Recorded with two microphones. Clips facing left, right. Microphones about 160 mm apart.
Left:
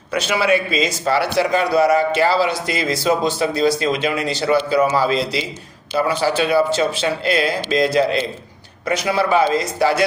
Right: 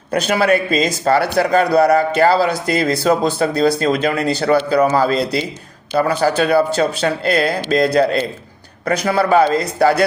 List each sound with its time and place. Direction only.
0.1 s a man's voice: 50° right (ahead or behind)